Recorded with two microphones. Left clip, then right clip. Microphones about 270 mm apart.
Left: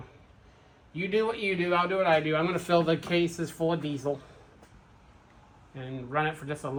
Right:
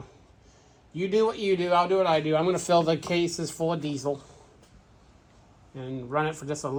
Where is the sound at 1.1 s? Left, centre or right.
Centre.